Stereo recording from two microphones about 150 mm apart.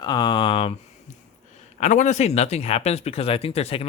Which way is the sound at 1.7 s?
50° left (ahead or behind).